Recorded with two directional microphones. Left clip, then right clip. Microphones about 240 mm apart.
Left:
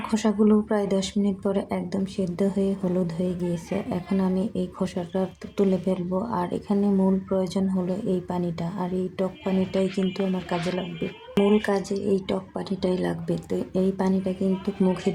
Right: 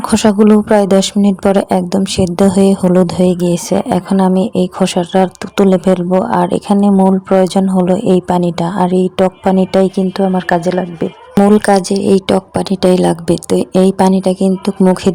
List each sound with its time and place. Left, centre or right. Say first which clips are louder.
0.1 s a woman's voice: right 13 dB; right